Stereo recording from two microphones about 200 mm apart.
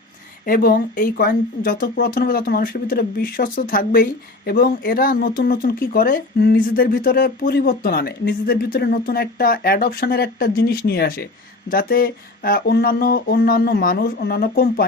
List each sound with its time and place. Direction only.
0.4 s speech: 45° left (ahead or behind)